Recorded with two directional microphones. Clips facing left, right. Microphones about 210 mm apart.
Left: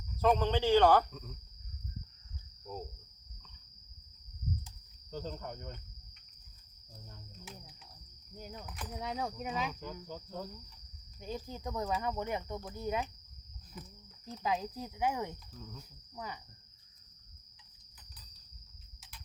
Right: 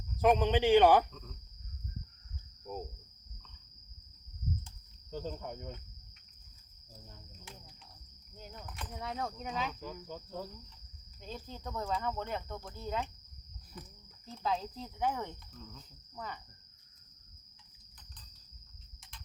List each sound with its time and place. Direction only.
0.2 s a man's voice: 15° right (ahead or behind)
1.1 s speech: 5° left (ahead or behind)
5.1 s speech: 5° right (ahead or behind)
6.9 s cricket: 5° right (ahead or behind)
8.5 s speech: 5° left (ahead or behind)
11.2 s speech: 15° left (ahead or behind)